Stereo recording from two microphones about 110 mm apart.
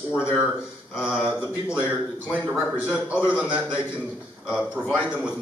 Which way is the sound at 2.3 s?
15° left (ahead or behind).